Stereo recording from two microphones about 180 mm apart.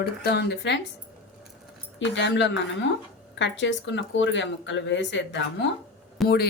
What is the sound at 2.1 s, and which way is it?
Speech, 80° left.